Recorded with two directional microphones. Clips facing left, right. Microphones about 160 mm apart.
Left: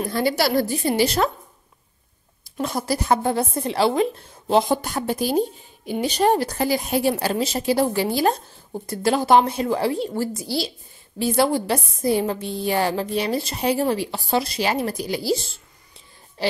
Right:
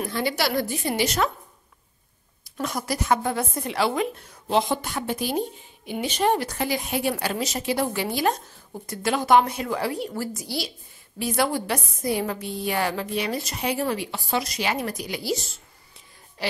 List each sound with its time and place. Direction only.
0.0 s a woman's voice: 40° left (ahead or behind)
2.5 s a woman's voice: 30° left (ahead or behind)
16.4 s music: 30° left (ahead or behind)